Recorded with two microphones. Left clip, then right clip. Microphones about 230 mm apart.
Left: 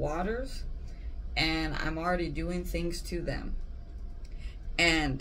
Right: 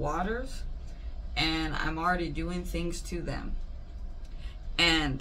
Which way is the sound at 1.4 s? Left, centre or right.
Right.